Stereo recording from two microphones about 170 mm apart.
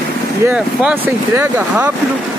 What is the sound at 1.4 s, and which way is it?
Speech, 10° right (ahead or behind).